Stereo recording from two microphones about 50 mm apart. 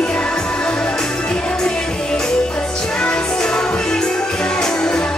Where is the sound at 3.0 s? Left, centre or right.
Centre.